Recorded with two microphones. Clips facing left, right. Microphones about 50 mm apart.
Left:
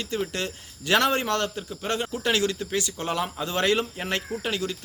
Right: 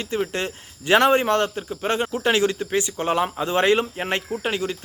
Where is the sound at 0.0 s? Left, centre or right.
Right.